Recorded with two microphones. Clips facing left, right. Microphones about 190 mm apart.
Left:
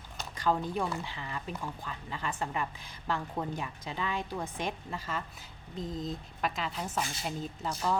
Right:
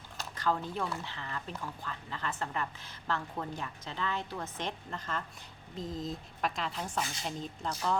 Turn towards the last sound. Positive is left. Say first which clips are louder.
# left 1 dB
turn(degrees=5)  # may be behind; listen again after turning